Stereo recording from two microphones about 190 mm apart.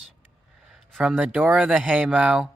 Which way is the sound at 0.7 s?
Centre (ahead or behind).